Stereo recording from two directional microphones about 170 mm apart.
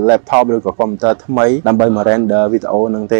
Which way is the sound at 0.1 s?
20° right (ahead or behind).